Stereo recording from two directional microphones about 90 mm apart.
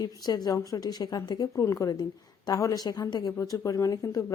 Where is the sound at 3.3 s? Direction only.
35° left (ahead or behind).